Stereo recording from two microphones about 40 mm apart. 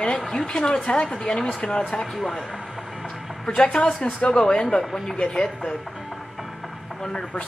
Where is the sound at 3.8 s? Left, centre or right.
Left.